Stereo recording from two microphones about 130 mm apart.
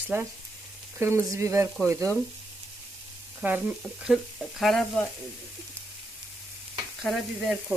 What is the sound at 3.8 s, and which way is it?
Speech, 5° right (ahead or behind).